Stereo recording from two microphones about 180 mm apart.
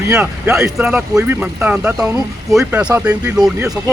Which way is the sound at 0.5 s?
Centre (ahead or behind).